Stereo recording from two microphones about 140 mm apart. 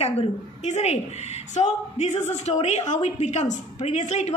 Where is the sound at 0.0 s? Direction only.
50° left (ahead or behind).